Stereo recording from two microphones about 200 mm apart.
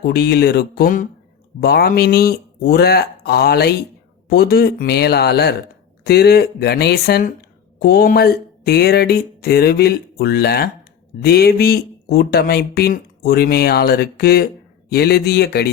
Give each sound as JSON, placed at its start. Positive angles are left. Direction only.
{"t": 0.0, "sound": "speech", "side_deg": 55}